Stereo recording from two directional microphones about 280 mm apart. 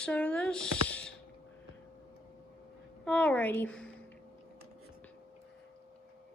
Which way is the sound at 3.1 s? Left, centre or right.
Centre.